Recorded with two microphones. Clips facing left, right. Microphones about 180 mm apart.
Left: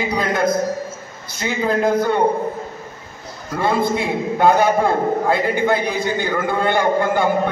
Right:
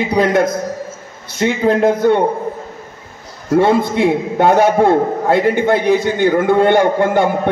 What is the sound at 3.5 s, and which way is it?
A man's voice, 75° right (ahead or behind).